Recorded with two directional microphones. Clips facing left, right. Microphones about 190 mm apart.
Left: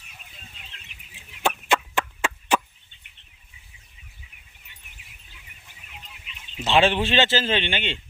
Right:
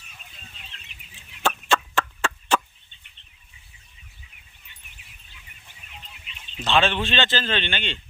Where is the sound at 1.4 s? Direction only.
20° left (ahead or behind).